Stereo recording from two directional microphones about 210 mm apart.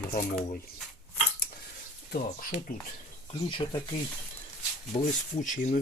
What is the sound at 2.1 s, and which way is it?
Speech, 40° left (ahead or behind).